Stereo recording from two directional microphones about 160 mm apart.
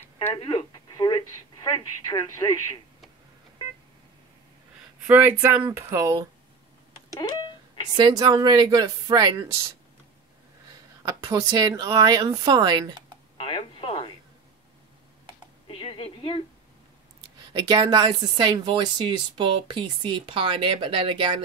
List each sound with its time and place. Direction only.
0.3 s speech: 30° left (ahead or behind)
5.0 s speech: 15° right (ahead or behind)
8.2 s speech: 25° right (ahead or behind)
11.0 s speech: 20° right (ahead or behind)
13.4 s a sound: 35° left (ahead or behind)
15.7 s a sound: 35° left (ahead or behind)
17.5 s speech: 25° right (ahead or behind)